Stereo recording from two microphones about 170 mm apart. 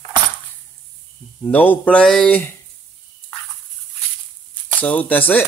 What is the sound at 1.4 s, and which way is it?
Speech, 10° left (ahead or behind).